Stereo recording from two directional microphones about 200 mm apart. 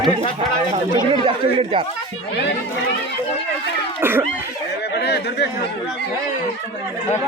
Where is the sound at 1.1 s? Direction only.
25° right (ahead or behind).